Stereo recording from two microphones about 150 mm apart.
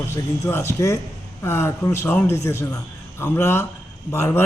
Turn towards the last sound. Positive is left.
turn(degrees=15)  # may be behind; listen again after turning